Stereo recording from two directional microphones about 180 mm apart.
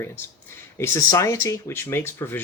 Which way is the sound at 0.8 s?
15° left (ahead or behind).